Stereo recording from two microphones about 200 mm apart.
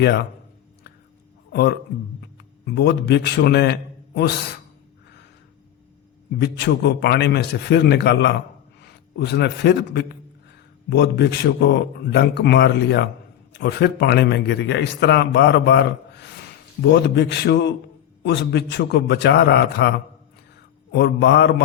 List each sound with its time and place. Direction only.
0.0 s a man's voice: 55° left (ahead or behind)
2.4 s a man's voice: 55° left (ahead or behind)
6.4 s a man's voice: 55° left (ahead or behind)